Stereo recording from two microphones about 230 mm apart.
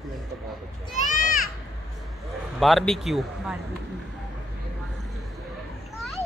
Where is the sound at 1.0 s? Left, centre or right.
Left.